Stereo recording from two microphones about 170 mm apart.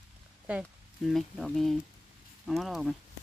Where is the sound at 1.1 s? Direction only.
Centre (ahead or behind).